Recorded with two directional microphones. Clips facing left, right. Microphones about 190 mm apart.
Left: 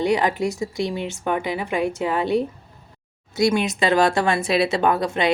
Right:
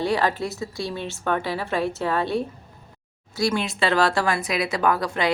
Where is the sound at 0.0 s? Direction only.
15° left (ahead or behind).